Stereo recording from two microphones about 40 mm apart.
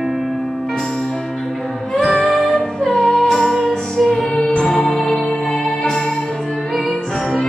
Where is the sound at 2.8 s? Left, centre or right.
Centre.